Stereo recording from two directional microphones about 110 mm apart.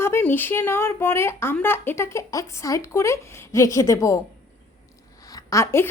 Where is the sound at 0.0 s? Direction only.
20° left (ahead or behind).